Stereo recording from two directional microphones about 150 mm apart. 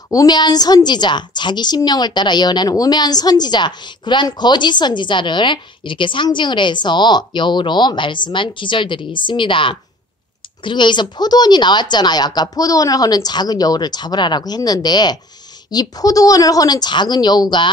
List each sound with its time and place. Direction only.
0.1 s a woman's voice: 25° left (ahead or behind)